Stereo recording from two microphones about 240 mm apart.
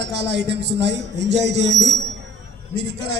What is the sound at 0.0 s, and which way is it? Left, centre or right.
Speech, right.